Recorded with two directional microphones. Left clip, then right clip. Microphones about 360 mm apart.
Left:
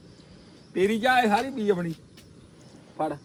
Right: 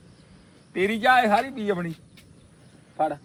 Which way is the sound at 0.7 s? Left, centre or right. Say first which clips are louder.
Right 2 dB; centre.